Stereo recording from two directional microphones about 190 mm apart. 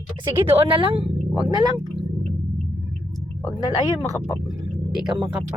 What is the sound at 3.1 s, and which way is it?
Whispering, centre (ahead or behind).